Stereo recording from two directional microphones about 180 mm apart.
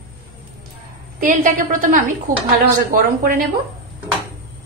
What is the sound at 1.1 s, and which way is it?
Speech, 50° right (ahead or behind).